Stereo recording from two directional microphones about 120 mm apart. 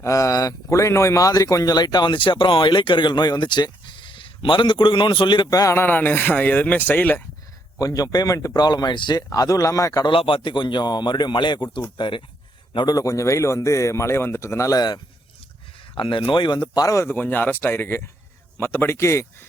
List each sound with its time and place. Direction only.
0.0 s speech: 30° left (ahead or behind)
7.8 s speech: 30° left (ahead or behind)
10.1 s speech: 45° left (ahead or behind)
16.0 s speech: 45° left (ahead or behind); by 19.2 s 25° left (ahead or behind)